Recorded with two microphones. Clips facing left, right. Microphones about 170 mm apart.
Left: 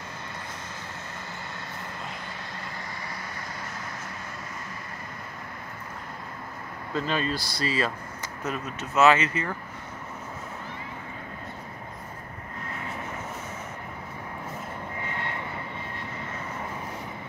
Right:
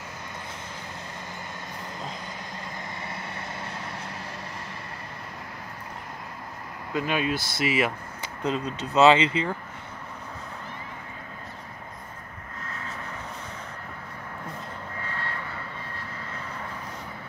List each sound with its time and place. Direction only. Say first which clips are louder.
6.9 s speech: right 1 dB; 10° right (ahead or behind)
15.0 s vehicle: left 1 dB; 20° left (ahead or behind)